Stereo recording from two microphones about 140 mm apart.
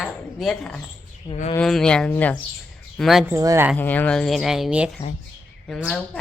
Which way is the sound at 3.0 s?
Centre (ahead or behind).